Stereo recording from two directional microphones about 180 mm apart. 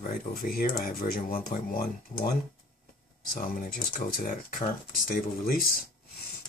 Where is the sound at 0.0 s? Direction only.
55° left (ahead or behind).